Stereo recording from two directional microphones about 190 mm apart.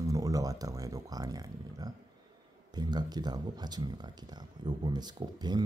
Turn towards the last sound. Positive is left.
turn(degrees=-20)  # may be behind; listen again after turning